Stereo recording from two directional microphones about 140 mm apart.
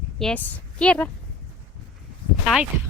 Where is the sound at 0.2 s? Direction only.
10° left (ahead or behind).